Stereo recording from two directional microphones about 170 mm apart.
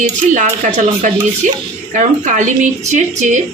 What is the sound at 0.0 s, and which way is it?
Speech, 45° right (ahead or behind).